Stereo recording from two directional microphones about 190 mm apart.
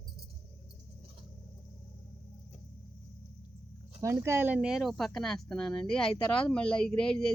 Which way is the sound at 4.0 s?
15° right (ahead or behind).